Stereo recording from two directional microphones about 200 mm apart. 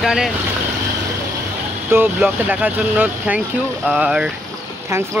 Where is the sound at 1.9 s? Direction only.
10° right (ahead or behind).